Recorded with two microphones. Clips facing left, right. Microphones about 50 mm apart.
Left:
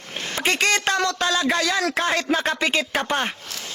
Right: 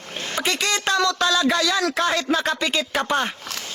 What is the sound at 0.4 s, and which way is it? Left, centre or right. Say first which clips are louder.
Speech: left 3 dB; left.